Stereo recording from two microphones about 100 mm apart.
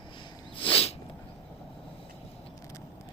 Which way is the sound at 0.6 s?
65° left (ahead or behind).